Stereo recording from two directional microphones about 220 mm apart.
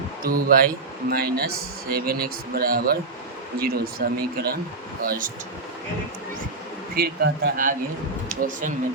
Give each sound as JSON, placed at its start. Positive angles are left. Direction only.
{"t": 0.2, "sound": "speech", "side_deg": -40}
{"t": 6.9, "sound": "speech", "side_deg": -45}